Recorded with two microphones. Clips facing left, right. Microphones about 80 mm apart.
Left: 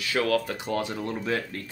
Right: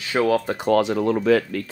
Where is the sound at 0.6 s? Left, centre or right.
Right.